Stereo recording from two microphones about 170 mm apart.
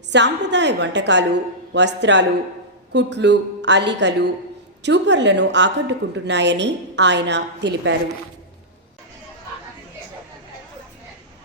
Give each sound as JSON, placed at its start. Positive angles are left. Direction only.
{"t": 0.1, "sound": "a woman's voice", "side_deg": -90}